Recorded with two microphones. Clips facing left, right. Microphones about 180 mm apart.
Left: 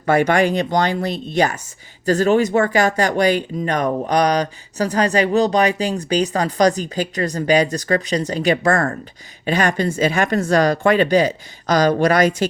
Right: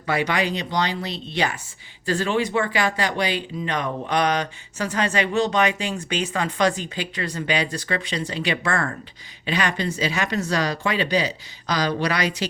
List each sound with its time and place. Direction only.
0.0 s speech: 50° left (ahead or behind)